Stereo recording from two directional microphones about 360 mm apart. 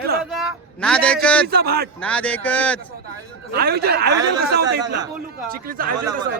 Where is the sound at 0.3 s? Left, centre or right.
Centre.